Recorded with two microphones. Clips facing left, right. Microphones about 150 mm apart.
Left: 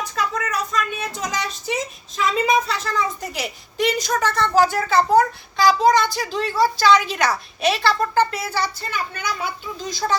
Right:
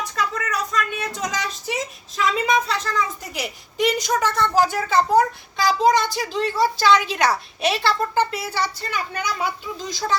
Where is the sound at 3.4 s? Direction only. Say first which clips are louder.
Right 1 dB; 15° right (ahead or behind).